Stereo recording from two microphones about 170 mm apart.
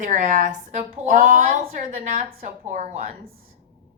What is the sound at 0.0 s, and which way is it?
Speech, 50° right (ahead or behind).